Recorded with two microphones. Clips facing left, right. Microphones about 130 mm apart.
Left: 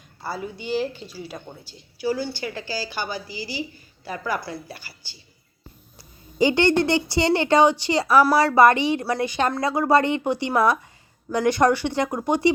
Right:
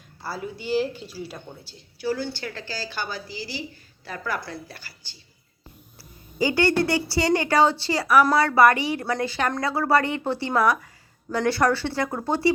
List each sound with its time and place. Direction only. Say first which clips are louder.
0.2 s a woman's voice: left 2 dB; centre (ahead or behind)
6.0 s a woman's voice: left 4 dB; 20° left (ahead or behind)